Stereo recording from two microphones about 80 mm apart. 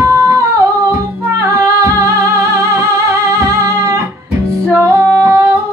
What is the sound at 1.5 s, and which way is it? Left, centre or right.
Music, right.